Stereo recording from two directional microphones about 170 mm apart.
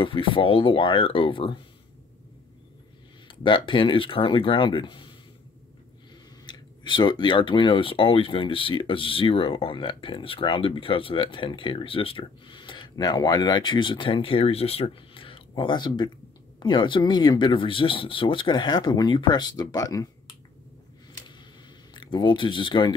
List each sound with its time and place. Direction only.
0.0 s speech: 30° left (ahead or behind)
3.3 s speech: 30° left (ahead or behind)
6.4 s speech: 25° left (ahead or behind)
21.9 s speech: 25° left (ahead or behind)